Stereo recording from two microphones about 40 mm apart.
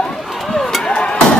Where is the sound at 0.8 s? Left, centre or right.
Left.